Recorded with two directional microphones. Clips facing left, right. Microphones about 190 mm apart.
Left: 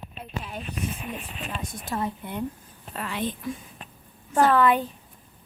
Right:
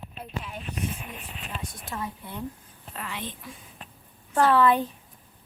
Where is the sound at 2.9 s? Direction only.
45° left (ahead or behind).